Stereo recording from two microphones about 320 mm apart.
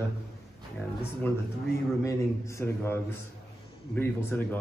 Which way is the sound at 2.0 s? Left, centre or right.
Centre.